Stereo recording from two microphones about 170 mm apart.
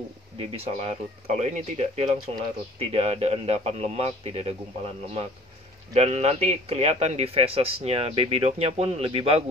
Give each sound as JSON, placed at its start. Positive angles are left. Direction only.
{"t": 0.4, "sound": "a man's voice", "side_deg": -35}